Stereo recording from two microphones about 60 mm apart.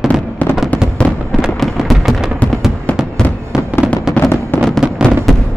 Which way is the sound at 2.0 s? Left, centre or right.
Centre.